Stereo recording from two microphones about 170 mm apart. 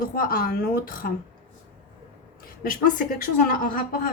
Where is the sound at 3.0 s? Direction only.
55° left (ahead or behind).